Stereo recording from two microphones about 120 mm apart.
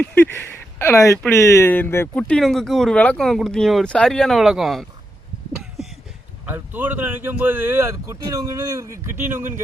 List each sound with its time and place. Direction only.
0.0 s speech: 15° left (ahead or behind)
2.1 s speech: 10° left (ahead or behind)
5.5 s a sound: centre (ahead or behind)
6.5 s speech: 15° right (ahead or behind)